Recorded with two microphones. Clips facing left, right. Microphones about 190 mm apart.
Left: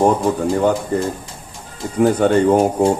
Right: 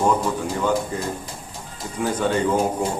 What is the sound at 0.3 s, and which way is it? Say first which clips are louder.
Speech: left 8 dB; 50° left (ahead or behind).